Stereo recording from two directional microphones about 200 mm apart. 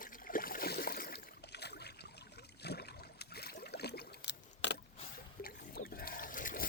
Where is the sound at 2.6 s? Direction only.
55° left (ahead or behind).